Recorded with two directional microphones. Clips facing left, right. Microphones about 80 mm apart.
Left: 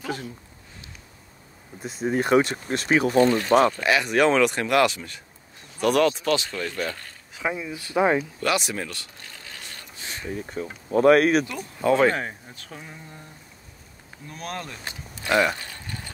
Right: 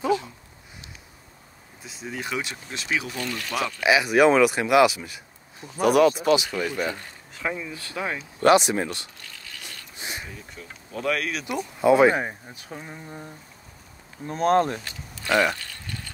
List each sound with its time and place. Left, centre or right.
1.8 s speech: left
3.8 s speech: centre
7.3 s speech: centre; by 8.2 s left
8.4 s speech: right
9.9 s a sound: centre
10.3 s speech: left
11.8 s speech: centre
14.2 s speech: right
15.2 s speech: centre
15.5 s a sound: left